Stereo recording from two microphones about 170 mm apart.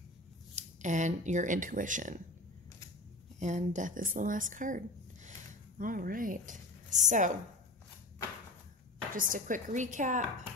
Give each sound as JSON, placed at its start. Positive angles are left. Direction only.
{"t": 0.6, "sound": "speech", "side_deg": -45}
{"t": 3.3, "sound": "a woman's voice", "side_deg": -45}
{"t": 9.1, "sound": "speech", "side_deg": -55}